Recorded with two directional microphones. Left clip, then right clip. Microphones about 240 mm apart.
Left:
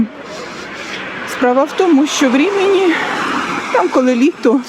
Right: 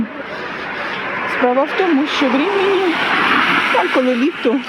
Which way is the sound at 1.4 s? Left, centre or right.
Left.